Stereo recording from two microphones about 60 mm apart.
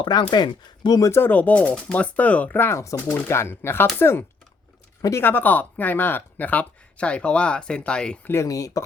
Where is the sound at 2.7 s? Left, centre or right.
Left.